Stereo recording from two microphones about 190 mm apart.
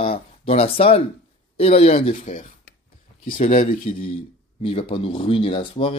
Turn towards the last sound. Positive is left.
turn(degrees=30)  # may be behind; listen again after turning